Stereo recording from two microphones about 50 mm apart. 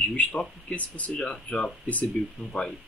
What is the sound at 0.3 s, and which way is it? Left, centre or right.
Speech, centre.